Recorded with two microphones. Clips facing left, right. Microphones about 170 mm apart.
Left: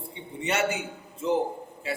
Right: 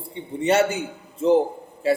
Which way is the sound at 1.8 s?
35° right (ahead or behind).